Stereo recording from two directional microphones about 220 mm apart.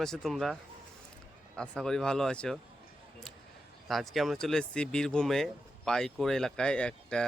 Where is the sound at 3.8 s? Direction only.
Centre (ahead or behind).